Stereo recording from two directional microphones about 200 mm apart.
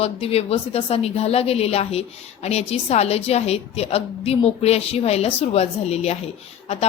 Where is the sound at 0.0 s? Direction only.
30° left (ahead or behind).